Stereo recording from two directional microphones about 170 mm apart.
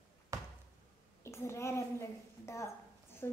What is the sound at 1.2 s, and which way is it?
A woman's voice, 15° left (ahead or behind).